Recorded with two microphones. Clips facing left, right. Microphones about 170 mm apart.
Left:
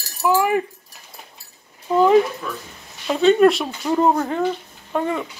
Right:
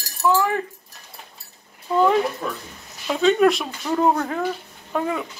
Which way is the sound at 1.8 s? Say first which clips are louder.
Left 4 dB; 5° left (ahead or behind).